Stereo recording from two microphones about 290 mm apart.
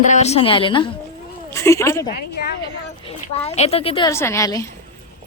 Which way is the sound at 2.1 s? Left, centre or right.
Left.